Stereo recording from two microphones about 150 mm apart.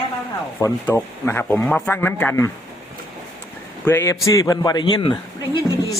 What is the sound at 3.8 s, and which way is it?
A man's voice, 15° left (ahead or behind).